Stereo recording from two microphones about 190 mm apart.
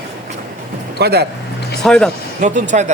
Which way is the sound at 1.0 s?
55° right (ahead or behind).